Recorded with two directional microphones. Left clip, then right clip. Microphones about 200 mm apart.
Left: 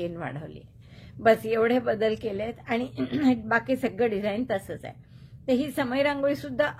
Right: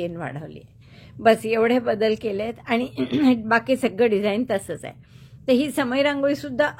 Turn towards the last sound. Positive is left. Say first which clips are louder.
# right 4 dB
turn(degrees=-25)  # may be behind; listen again after turning